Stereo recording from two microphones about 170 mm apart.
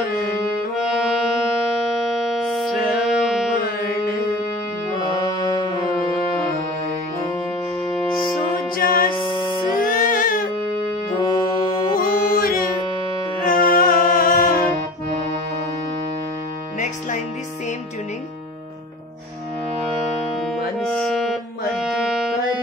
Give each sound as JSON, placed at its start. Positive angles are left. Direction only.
{"t": 0.7, "sound": "music", "side_deg": -5}
{"t": 2.2, "sound": "music", "side_deg": 0}
{"t": 5.2, "sound": "music", "side_deg": 25}
{"t": 8.7, "sound": "music", "side_deg": 55}
{"t": 9.2, "sound": "music", "side_deg": 25}
{"t": 9.8, "sound": "music", "side_deg": 55}
{"t": 10.7, "sound": "music", "side_deg": 25}
{"t": 12.0, "sound": "music", "side_deg": 60}
{"t": 20.9, "sound": "music", "side_deg": 0}